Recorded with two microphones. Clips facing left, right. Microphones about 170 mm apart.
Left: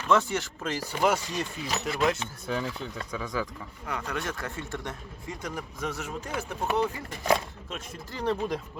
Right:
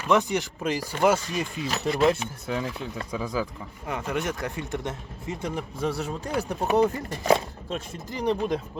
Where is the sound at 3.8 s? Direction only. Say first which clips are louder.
Right 4 dB; 20° right (ahead or behind).